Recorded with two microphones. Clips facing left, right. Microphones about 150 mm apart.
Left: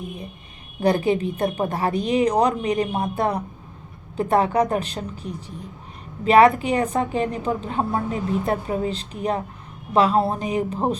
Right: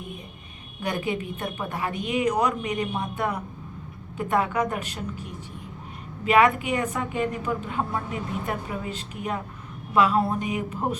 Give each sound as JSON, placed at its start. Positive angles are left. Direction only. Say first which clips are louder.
{"t": 0.8, "sound": "a woman's voice", "louder": "left 9 dB", "side_deg": 35}